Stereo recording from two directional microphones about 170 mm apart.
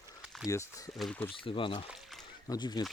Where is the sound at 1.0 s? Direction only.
5° left (ahead or behind).